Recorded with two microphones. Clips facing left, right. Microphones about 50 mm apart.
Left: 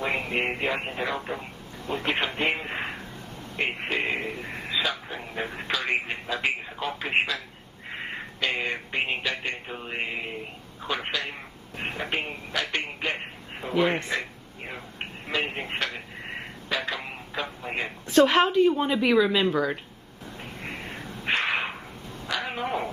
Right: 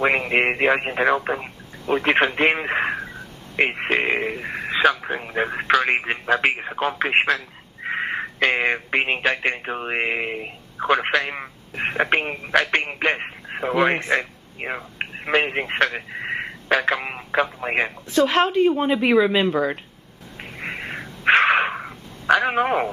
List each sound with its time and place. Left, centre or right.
0.0 s speech: right
1.2 s speech: right
1.9 s speech: right
7.9 s speech: right
14.6 s speech: right
15.3 s speech: right
18.3 s a woman's voice: centre
18.7 s speech: right
20.6 s a sound: right
22.3 s speech: right